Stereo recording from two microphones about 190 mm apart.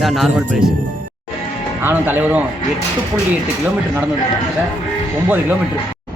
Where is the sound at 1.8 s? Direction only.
10° right (ahead or behind).